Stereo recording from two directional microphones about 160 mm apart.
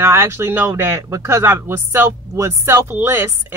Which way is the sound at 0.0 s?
15° right (ahead or behind).